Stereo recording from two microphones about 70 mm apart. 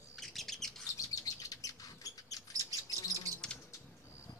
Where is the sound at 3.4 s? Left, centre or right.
Centre.